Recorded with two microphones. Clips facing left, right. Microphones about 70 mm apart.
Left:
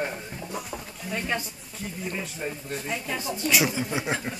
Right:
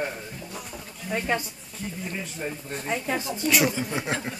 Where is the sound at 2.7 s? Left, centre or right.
Right.